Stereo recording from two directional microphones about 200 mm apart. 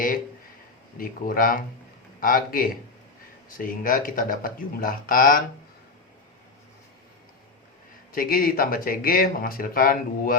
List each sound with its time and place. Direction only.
0.9 s speech: 45° left (ahead or behind)
8.1 s speech: 45° left (ahead or behind)